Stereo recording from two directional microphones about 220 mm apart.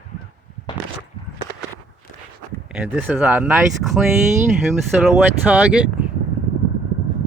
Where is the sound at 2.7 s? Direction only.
5° right (ahead or behind).